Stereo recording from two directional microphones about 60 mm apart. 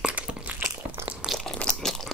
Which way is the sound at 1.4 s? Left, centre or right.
Centre.